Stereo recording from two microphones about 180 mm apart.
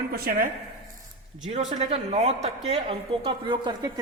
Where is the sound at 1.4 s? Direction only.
40° right (ahead or behind).